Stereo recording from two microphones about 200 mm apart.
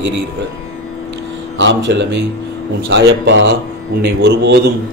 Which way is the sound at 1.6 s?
65° right (ahead or behind).